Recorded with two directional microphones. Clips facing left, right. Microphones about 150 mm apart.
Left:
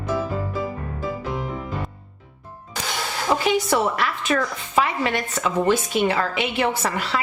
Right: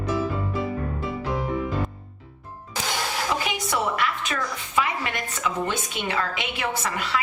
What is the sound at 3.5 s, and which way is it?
A woman's voice, 35° left (ahead or behind).